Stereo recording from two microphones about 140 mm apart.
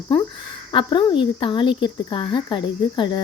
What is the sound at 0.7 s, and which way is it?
Speech, 35° left (ahead or behind).